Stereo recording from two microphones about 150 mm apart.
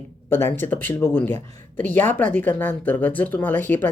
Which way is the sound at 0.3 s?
15° left (ahead or behind).